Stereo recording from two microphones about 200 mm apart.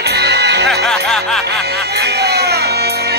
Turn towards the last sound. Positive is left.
turn(degrees=-55)  # may be behind; listen again after turning